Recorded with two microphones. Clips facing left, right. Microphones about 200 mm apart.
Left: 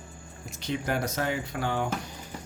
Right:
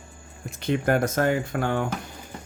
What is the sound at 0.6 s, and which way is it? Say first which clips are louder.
Speech: right 7 dB; 55° right (ahead or behind).